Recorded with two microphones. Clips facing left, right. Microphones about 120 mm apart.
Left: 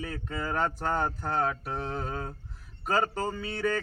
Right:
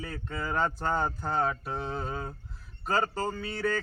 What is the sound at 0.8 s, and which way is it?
Mantra, 5° left (ahead or behind).